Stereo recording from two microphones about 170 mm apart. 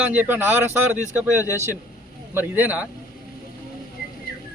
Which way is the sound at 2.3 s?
10° right (ahead or behind).